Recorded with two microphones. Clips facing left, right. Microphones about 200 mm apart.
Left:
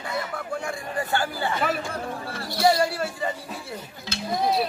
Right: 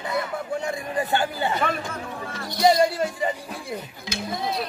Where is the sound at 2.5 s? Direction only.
20° right (ahead or behind).